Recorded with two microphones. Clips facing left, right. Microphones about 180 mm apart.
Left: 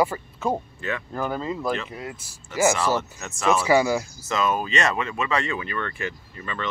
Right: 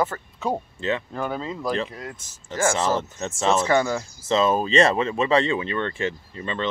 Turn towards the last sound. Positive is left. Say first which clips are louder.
# right 4 dB
turn(degrees=-25)  # may be behind; listen again after turning